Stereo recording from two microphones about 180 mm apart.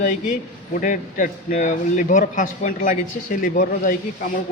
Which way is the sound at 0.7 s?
45° left (ahead or behind).